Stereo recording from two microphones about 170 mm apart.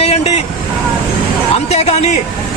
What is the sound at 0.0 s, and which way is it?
Vehicle, 35° left (ahead or behind).